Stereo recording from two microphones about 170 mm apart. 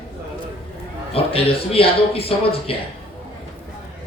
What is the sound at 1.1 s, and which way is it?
A man's voice, 35° left (ahead or behind).